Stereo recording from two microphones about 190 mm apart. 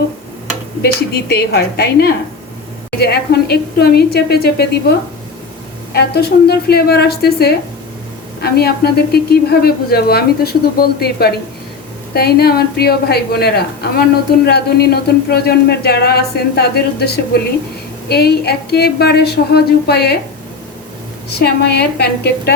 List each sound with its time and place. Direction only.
0.8 s a woman's voice: 55° left (ahead or behind)
21.3 s a woman's voice: 60° left (ahead or behind)